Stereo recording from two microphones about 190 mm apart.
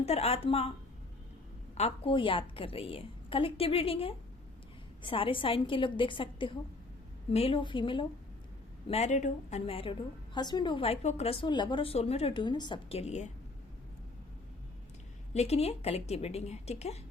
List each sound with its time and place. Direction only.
0.0 s a woman's voice: 35° left (ahead or behind)
1.7 s a woman's voice: 30° left (ahead or behind)
8.9 s a woman's voice: 35° left (ahead or behind)
15.3 s a woman's voice: 35° left (ahead or behind)